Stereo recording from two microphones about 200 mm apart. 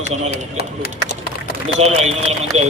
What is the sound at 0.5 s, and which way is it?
Speech, 50° left (ahead or behind).